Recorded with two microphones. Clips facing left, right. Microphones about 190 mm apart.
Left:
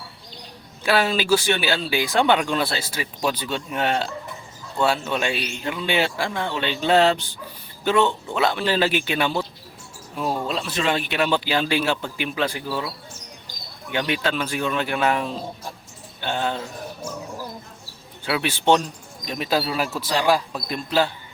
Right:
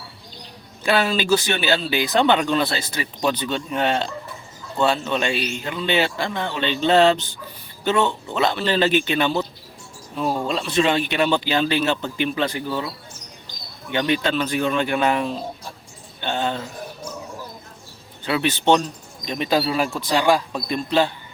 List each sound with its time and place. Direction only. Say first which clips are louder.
0.9 s speech: right 1 dB; 5° left (ahead or behind)
13.9 s speech: right 3 dB; 5° left (ahead or behind)
18.3 s speech: right 1 dB; 5° left (ahead or behind)